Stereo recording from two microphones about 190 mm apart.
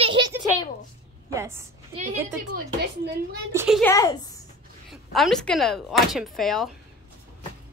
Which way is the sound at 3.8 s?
20° left (ahead or behind).